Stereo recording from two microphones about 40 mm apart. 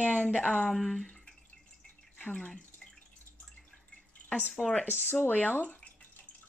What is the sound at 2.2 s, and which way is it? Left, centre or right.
Speech, left.